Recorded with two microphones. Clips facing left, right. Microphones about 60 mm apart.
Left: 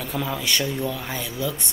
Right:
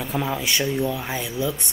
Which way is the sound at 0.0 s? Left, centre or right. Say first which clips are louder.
Right 2 dB; centre.